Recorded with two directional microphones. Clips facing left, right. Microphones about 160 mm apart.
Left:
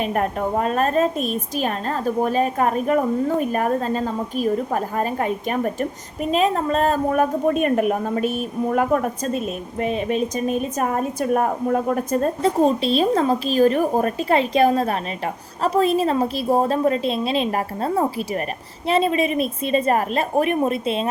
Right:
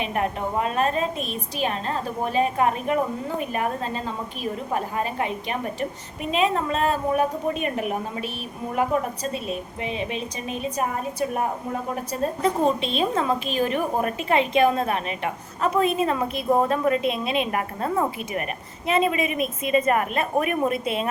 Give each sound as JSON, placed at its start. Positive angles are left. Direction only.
{"t": 0.0, "sound": "a woman's voice", "side_deg": 45}
{"t": 12.4, "sound": "a woman's voice", "side_deg": 35}